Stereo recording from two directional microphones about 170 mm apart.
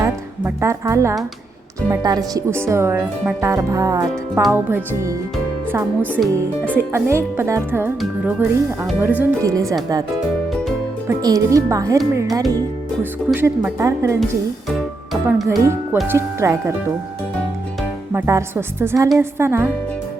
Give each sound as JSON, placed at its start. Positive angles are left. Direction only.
{"t": 0.0, "sound": "speech", "side_deg": -15}
{"t": 10.5, "sound": "music", "side_deg": 0}
{"t": 11.1, "sound": "speech", "side_deg": -20}
{"t": 14.7, "sound": "music", "side_deg": 0}
{"t": 15.4, "sound": "speech", "side_deg": -15}
{"t": 18.1, "sound": "speech", "side_deg": -15}